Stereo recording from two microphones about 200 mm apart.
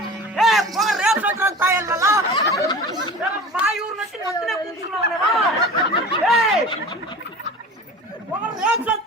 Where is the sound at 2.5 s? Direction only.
15° left (ahead or behind).